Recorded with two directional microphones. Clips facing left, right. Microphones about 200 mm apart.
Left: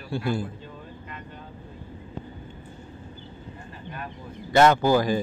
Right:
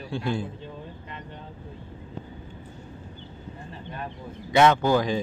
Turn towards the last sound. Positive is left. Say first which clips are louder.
# left 2 dB
turn(degrees=5)  # may be behind; listen again after turning